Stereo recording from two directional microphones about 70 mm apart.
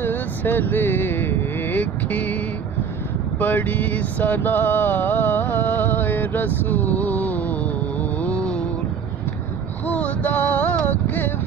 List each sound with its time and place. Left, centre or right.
0.0 s vehicle: left
3.3 s mantra: left
6.9 s a sound: left
8.2 s music: centre
9.8 s music: centre